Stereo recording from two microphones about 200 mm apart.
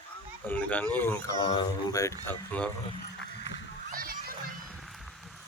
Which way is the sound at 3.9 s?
45° right (ahead or behind).